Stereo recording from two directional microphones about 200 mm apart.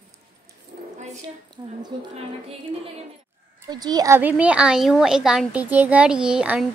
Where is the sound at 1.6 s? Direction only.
20° right (ahead or behind).